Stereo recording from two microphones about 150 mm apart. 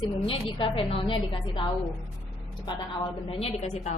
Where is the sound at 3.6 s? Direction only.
50° left (ahead or behind).